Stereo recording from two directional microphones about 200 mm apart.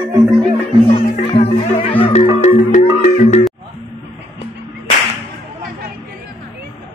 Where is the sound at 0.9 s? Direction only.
25° left (ahead or behind).